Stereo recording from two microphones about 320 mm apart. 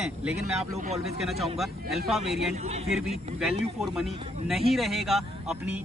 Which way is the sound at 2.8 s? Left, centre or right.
Centre.